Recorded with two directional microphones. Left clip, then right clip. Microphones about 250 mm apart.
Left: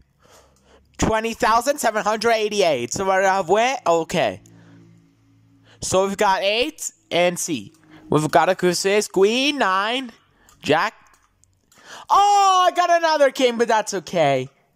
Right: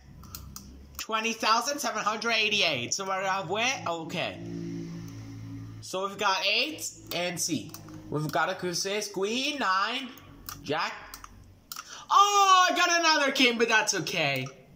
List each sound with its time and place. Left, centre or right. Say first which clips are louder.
0.9 s speech: left 9 dB; left
5.8 s speech: left 13 dB; left